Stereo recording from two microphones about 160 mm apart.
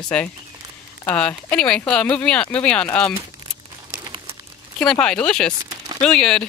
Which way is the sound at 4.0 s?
30° right (ahead or behind).